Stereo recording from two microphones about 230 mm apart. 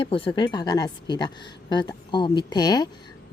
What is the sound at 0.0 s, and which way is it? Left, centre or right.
Speech, left.